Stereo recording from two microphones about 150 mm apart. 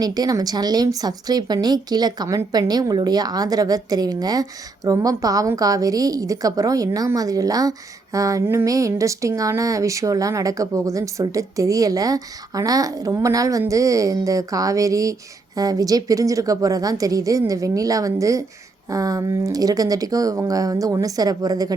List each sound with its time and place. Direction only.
0.0 s speech: 25° right (ahead or behind)